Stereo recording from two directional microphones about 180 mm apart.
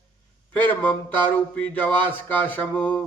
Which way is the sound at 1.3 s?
5° left (ahead or behind).